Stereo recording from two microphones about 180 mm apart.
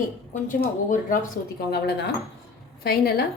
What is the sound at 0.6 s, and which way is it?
Speech, 55° left (ahead or behind).